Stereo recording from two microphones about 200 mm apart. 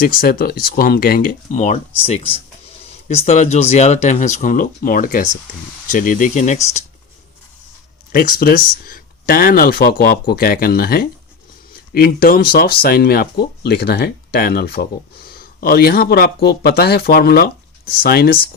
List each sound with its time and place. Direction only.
0.0 s speech: 45° left (ahead or behind)
8.1 s speech: 45° left (ahead or behind)